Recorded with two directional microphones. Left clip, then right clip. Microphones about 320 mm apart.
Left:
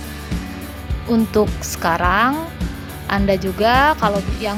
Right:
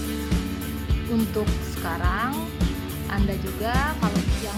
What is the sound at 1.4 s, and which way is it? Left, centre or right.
Speech, left.